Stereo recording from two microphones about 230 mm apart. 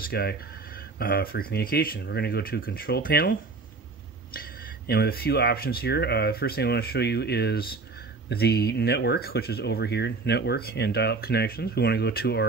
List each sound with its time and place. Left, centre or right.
0.1 s speech: left